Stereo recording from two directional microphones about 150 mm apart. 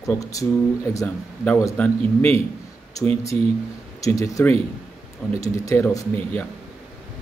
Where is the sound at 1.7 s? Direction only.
10° left (ahead or behind).